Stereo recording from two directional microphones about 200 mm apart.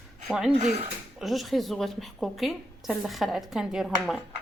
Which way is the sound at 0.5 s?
35° right (ahead or behind).